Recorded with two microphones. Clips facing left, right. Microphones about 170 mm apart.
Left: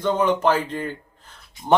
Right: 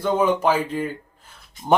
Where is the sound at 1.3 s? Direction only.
10° right (ahead or behind).